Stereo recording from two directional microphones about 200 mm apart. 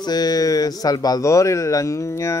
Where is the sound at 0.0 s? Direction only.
20° left (ahead or behind).